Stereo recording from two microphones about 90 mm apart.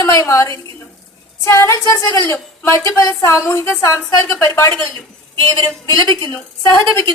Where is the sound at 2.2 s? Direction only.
30° left (ahead or behind).